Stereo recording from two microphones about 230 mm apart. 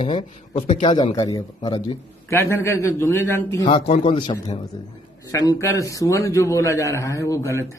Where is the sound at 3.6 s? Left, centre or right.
Left.